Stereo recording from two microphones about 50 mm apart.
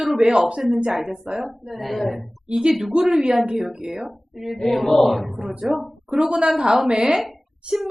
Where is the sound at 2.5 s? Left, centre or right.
Centre.